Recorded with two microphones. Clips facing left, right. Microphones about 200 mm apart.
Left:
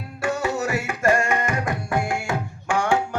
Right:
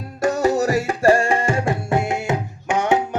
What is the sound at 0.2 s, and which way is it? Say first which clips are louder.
Music: right 6 dB; 40° right (ahead or behind).